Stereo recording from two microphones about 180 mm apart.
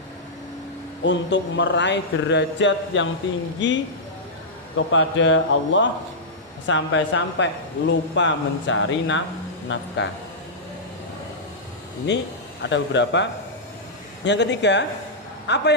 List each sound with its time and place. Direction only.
1.0 s a man's voice: 80° left
4.9 s a man's voice: 90° left
10.0 s speech: 75° left (ahead or behind)
12.6 s a man's voice: 80° left
14.3 s a man's voice: 75° left (ahead or behind)